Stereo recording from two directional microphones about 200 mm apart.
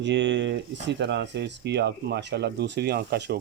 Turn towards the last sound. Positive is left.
turn(degrees=-55)  # may be behind; listen again after turning